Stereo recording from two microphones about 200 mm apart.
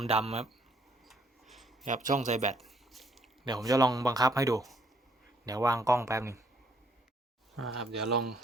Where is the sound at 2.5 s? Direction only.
Centre (ahead or behind).